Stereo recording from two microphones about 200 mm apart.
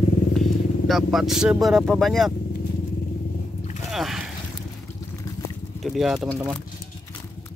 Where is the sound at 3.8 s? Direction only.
Centre (ahead or behind).